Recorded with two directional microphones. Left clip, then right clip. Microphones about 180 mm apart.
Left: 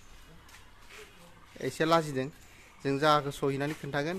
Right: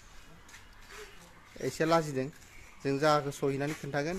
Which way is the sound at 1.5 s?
Centre (ahead or behind).